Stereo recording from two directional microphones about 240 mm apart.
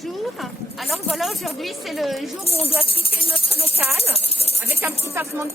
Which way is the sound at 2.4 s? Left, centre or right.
Left.